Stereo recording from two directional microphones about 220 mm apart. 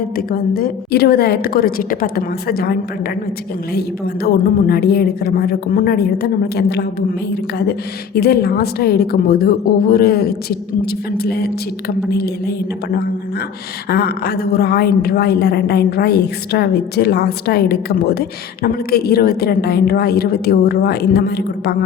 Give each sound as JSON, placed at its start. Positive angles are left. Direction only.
{"t": 0.2, "sound": "a woman's voice", "side_deg": 40}
{"t": 3.8, "sound": "a woman's voice", "side_deg": 45}